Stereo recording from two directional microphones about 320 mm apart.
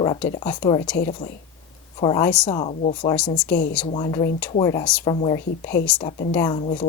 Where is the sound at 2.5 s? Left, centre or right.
Centre.